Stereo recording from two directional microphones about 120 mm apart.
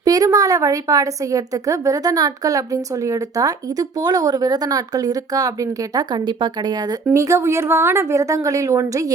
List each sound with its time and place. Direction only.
0.0 s a woman's voice: 30° right (ahead or behind)
7.1 s a woman's voice: 25° right (ahead or behind)